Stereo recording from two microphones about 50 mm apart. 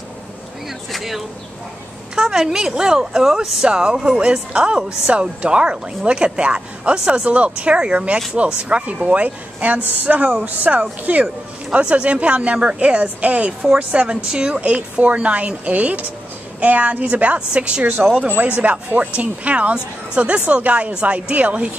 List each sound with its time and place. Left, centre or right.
0.9 s speech: centre; by 14.1 s right
14.2 s speech: centre